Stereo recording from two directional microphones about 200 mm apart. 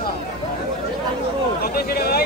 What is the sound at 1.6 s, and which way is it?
Speech, 50° left (ahead or behind).